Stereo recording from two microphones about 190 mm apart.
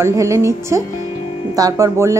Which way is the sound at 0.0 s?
15° right (ahead or behind).